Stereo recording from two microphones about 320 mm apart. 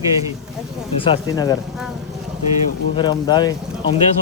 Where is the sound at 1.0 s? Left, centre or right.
Centre.